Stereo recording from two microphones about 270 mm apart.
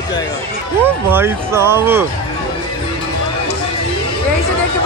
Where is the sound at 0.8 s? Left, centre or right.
Centre.